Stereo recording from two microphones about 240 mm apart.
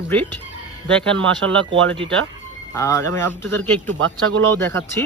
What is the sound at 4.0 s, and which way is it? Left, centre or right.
Speech, right.